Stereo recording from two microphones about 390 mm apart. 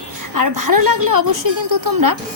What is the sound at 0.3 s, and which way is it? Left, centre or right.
Speech, right.